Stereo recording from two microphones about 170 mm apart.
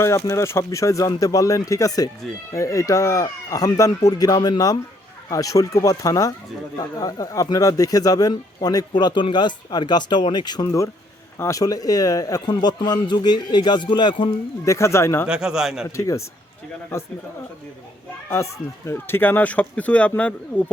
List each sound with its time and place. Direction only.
0.0 s speech: 15° left (ahead or behind)
15.3 s a man's voice: 5° right (ahead or behind)
16.0 s speech: 20° left (ahead or behind)
18.9 s speech: 15° left (ahead or behind)